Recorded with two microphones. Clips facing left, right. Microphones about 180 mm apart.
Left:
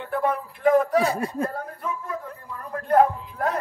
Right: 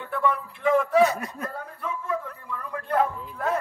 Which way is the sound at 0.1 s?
45° left (ahead or behind).